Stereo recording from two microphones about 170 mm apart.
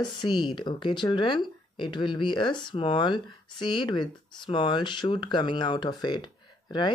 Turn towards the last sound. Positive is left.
turn(degrees=25)  # may be behind; listen again after turning